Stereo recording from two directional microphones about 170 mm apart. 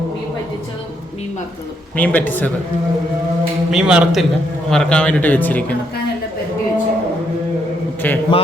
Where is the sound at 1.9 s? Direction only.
10° left (ahead or behind).